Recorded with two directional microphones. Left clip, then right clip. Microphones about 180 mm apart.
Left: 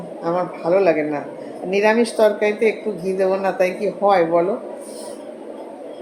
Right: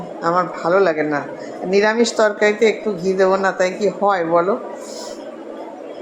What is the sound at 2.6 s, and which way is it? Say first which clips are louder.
A woman's voice: right 3 dB; 5° right (ahead or behind).